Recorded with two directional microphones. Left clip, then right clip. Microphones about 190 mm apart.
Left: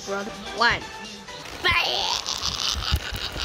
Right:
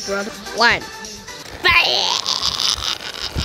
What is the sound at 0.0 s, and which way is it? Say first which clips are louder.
Speech: right 6 dB; 30° right (ahead or behind).